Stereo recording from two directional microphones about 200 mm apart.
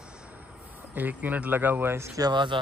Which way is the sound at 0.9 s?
10° right (ahead or behind).